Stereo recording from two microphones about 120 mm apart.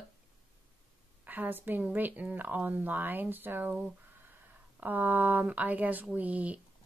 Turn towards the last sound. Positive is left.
turn(degrees=-10)  # may be behind; listen again after turning